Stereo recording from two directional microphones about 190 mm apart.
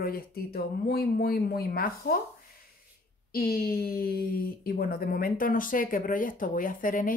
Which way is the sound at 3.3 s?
55° left (ahead or behind).